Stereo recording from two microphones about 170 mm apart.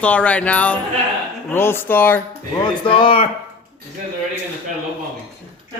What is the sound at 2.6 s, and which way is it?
Speech, 30° left (ahead or behind).